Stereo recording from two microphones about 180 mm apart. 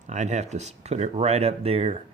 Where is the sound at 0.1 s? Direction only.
40° right (ahead or behind).